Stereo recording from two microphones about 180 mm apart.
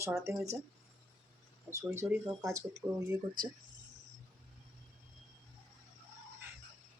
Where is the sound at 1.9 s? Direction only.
15° right (ahead or behind).